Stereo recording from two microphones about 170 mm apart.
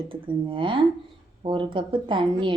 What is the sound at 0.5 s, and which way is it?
A woman's voice, 30° right (ahead or behind).